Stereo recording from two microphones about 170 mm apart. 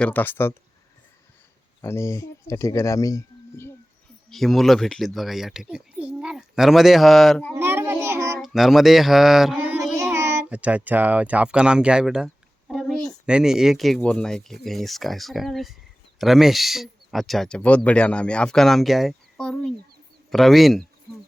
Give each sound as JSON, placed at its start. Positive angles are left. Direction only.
{"t": 0.0, "sound": "speech", "side_deg": 10}
{"t": 1.8, "sound": "speech", "side_deg": 15}
{"t": 4.3, "sound": "speech", "side_deg": 0}
{"t": 7.5, "sound": "child singing", "side_deg": -15}
{"t": 8.4, "sound": "child singing", "side_deg": 0}
{"t": 9.9, "sound": "a child's voice", "side_deg": -15}